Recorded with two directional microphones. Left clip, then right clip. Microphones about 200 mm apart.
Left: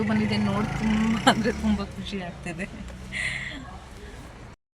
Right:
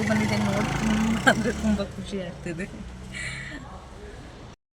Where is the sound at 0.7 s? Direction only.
Centre (ahead or behind).